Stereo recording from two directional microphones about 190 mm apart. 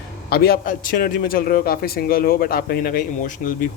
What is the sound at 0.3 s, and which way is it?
Speech, 55° left (ahead or behind).